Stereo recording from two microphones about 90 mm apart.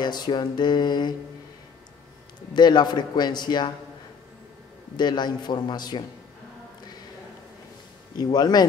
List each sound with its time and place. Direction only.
0.0 s music: 55° left (ahead or behind)
2.5 s a man's voice: 55° left (ahead or behind)
4.9 s music: 55° left (ahead or behind)
8.2 s a man's voice: 50° left (ahead or behind)